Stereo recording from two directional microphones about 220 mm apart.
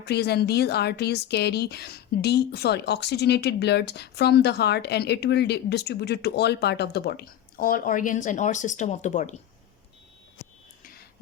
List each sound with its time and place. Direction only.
0.0 s speech: 50° left (ahead or behind); by 9.3 s 35° left (ahead or behind)